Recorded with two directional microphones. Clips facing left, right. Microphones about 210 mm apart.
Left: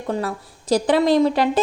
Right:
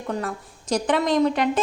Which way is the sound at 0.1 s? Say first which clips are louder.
Left 4 dB; 35° left (ahead or behind).